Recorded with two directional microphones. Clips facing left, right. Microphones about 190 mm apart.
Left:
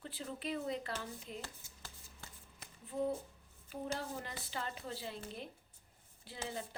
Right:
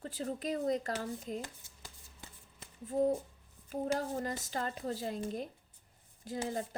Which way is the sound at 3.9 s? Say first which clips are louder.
Right 8 dB; 45° right (ahead or behind).